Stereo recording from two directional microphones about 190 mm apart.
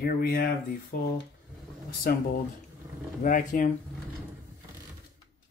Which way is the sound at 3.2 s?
45° left (ahead or behind).